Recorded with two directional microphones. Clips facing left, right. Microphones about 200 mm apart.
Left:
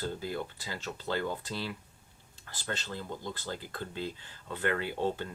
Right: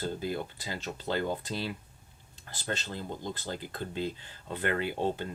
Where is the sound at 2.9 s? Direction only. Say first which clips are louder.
Right 2 dB; 20° right (ahead or behind).